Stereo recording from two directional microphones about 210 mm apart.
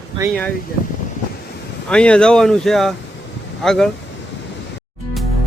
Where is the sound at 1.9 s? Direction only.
5° left (ahead or behind).